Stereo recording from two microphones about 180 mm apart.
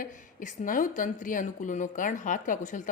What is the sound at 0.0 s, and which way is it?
A woman's voice, 45° left (ahead or behind).